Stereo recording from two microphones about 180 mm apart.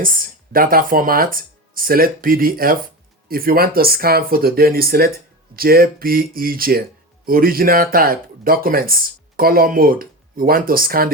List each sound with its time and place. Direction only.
0.0 s speech: 50° right (ahead or behind)